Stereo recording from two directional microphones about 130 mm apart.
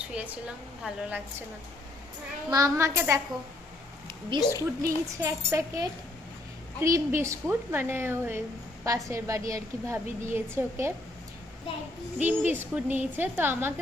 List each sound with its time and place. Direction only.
0.1 s a woman's voice: 10° right (ahead or behind)
2.5 s a woman's voice: 25° right (ahead or behind)
4.3 s a woman's voice: 40° right (ahead or behind)
4.8 s a woman's voice: 25° right (ahead or behind)
12.2 s a woman's voice: 15° right (ahead or behind)